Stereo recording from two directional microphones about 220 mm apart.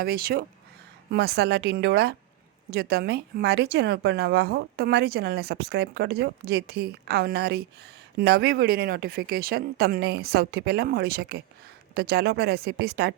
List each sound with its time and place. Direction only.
0.0 s speech: 45° right (ahead or behind)